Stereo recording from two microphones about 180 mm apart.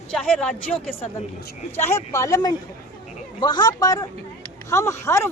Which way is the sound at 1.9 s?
15° left (ahead or behind).